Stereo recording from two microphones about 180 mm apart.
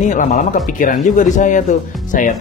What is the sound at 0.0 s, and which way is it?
Speech, 45° left (ahead or behind).